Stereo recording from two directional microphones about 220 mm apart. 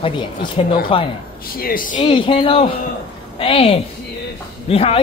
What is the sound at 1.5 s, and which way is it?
Speech, 40° left (ahead or behind).